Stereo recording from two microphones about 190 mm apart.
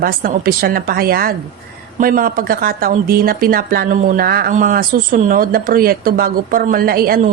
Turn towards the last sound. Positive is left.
turn(degrees=-50)  # may be behind; listen again after turning